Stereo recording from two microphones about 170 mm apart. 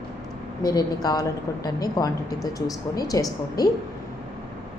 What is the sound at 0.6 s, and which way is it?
A woman's voice, 20° left (ahead or behind).